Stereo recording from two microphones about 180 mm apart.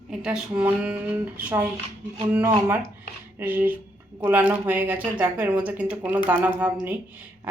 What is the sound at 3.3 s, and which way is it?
Speech, 10° right (ahead or behind).